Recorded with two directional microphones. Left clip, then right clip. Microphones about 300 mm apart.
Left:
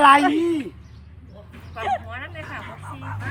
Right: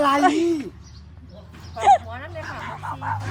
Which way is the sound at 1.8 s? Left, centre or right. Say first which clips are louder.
Right 9 dB; centre.